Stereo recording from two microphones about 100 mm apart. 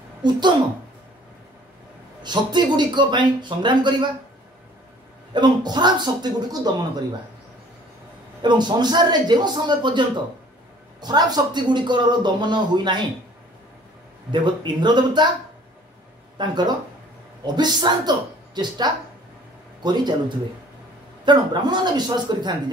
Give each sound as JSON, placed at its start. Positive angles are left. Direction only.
{"t": 0.2, "sound": "speech", "side_deg": -50}
{"t": 2.2, "sound": "speech", "side_deg": -45}
{"t": 5.3, "sound": "speech", "side_deg": -45}
{"t": 8.4, "sound": "speech", "side_deg": -50}
{"t": 14.3, "sound": "speech", "side_deg": -50}
{"t": 16.3, "sound": "speech", "side_deg": -45}